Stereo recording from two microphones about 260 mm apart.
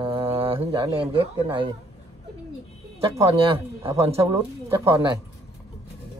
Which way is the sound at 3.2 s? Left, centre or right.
Right.